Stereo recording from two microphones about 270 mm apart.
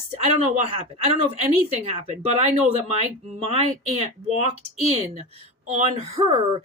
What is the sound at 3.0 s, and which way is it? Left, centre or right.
Speech, right.